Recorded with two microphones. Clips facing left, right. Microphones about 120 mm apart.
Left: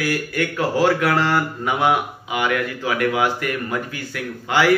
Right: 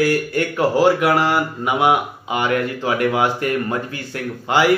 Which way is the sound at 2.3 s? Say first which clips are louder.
Right 2 dB; 30° right (ahead or behind).